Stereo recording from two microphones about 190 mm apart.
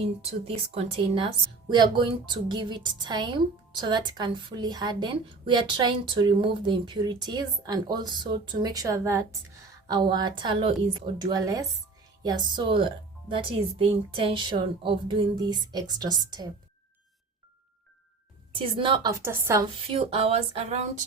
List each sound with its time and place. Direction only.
0.0 s a woman's voice: 30° right (ahead or behind)
18.5 s a woman's voice: 30° right (ahead or behind)
19.2 s speech: 15° right (ahead or behind)
19.6 s a woman's voice: 30° right (ahead or behind)